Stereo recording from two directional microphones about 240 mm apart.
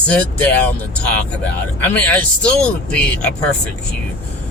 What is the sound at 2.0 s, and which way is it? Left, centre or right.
Speech, centre.